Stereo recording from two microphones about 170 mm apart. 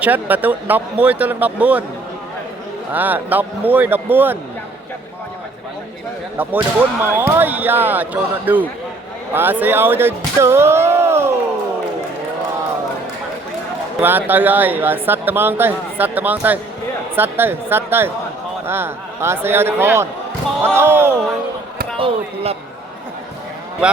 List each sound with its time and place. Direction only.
0.0 s speech: 10° right (ahead or behind)
2.9 s speech: 10° right (ahead or behind)
6.3 s speech: 10° right (ahead or behind)
14.0 s speech: 10° right (ahead or behind)
21.9 s speech: 30° right (ahead or behind)